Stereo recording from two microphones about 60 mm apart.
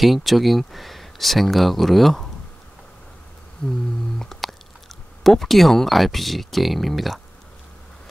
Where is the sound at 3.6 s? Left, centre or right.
Centre.